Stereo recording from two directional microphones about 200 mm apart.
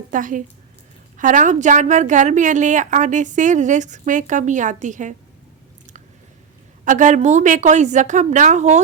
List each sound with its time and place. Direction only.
0.1 s a woman's voice: 40° right (ahead or behind)
6.8 s a woman's voice: 40° right (ahead or behind)